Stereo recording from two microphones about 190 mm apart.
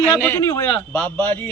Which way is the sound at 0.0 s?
10° left (ahead or behind).